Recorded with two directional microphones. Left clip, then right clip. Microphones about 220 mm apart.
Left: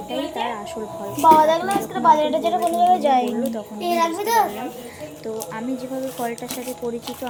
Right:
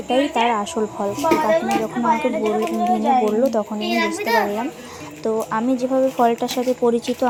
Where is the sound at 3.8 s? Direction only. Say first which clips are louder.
Left 5 dB; 55° left (ahead or behind).